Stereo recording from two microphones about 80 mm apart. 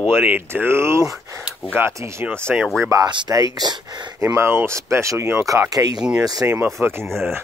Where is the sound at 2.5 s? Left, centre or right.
Centre.